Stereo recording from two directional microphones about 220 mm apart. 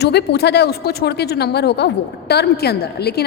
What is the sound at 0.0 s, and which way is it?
A woman's voice, 50° left (ahead or behind).